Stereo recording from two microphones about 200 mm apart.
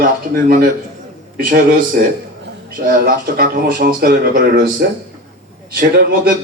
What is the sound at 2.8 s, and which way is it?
Speech, 50° right (ahead or behind).